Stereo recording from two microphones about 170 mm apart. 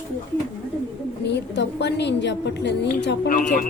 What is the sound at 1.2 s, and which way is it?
A woman's voice, 90° left.